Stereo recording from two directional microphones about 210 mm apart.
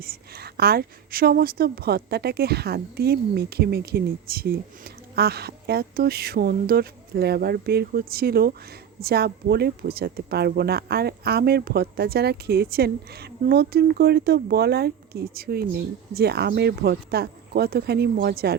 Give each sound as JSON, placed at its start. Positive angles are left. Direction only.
{"t": 0.0, "sound": "a woman's voice", "side_deg": -45}